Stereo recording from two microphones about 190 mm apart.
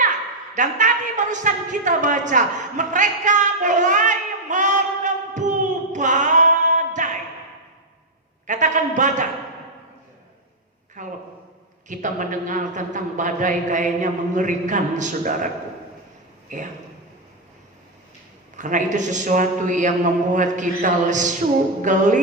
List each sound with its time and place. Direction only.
0.0 s a sound: 40° right (ahead or behind)
8.4 s a man's voice: 40° right (ahead or behind)
11.0 s a sound: 40° right (ahead or behind)
11.9 s a man's voice: 40° right (ahead or behind)
16.5 s a man's voice: 40° right (ahead or behind)
18.5 s a man's voice: 40° right (ahead or behind)